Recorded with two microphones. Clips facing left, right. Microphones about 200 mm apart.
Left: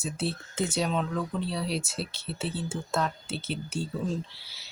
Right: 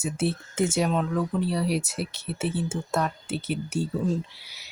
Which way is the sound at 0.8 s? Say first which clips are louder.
Right 4 dB; 10° right (ahead or behind).